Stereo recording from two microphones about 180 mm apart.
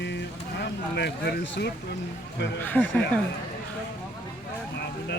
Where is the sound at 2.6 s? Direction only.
10° left (ahead or behind).